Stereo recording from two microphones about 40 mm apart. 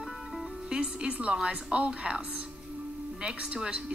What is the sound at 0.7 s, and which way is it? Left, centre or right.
Speech, right.